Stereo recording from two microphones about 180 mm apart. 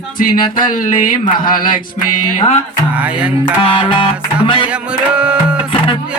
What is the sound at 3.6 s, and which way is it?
Music, 30° left (ahead or behind).